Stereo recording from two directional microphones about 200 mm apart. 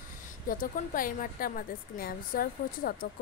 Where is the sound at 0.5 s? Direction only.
45° left (ahead or behind).